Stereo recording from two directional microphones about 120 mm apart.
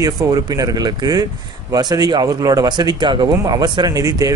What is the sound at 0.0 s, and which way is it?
A man's voice, 30° right (ahead or behind).